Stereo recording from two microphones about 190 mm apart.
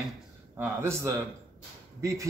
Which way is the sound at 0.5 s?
10° right (ahead or behind).